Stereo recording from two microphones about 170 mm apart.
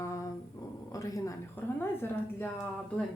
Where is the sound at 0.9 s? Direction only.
20° left (ahead or behind).